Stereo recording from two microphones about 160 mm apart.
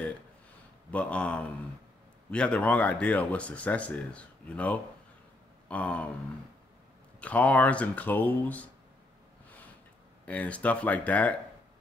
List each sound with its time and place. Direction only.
0.9 s speech: 10° left (ahead or behind)
7.2 s speech: 10° left (ahead or behind)
10.2 s speech: 10° left (ahead or behind)